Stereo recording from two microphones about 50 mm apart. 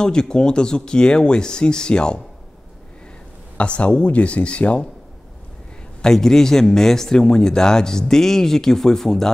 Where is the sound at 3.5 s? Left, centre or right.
Left.